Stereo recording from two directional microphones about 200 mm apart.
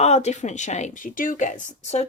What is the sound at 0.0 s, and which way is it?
Speech, 35° left (ahead or behind).